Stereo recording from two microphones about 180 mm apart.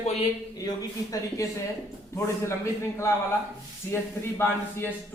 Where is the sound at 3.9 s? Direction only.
15° left (ahead or behind).